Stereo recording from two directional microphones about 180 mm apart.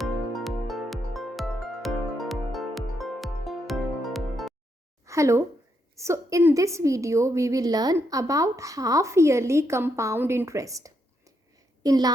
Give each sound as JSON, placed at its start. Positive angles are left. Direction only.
{"t": 0.0, "sound": "music", "side_deg": 0}
{"t": 5.0, "sound": "a woman's voice", "side_deg": -15}